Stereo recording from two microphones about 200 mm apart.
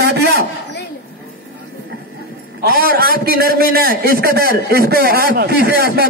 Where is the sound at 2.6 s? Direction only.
50° right (ahead or behind).